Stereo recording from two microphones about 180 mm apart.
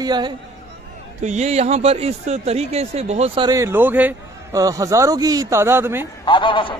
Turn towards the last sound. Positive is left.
turn(degrees=25)  # may be behind; listen again after turning